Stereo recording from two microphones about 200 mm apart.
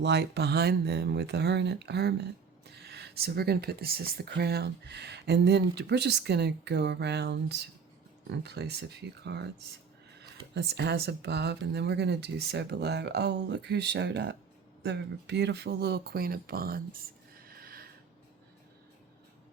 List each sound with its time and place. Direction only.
0.0 s speech: 60° right (ahead or behind)